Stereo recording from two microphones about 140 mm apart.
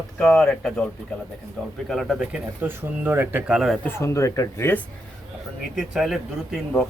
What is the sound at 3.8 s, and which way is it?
Speech, 15° left (ahead or behind).